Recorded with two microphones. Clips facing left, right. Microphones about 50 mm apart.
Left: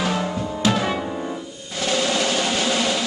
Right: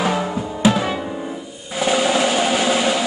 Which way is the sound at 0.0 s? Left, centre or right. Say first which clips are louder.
Right 3 dB; centre.